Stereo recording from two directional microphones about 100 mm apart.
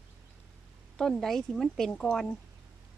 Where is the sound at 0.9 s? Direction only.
5° left (ahead or behind).